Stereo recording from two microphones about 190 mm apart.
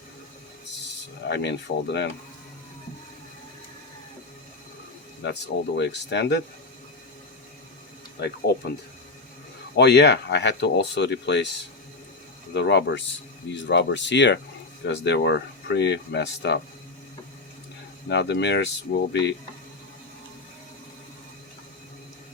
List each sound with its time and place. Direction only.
1.3 s speech: 65° left (ahead or behind)
5.2 s speech: 65° left (ahead or behind)
9.7 s speech: 60° left (ahead or behind)
12.5 s speech: 65° left (ahead or behind)
18.1 s speech: 65° left (ahead or behind)